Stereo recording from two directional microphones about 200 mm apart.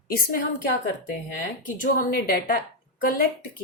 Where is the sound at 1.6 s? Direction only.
45° left (ahead or behind).